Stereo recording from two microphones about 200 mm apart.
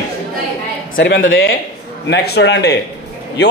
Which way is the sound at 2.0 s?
60° left (ahead or behind).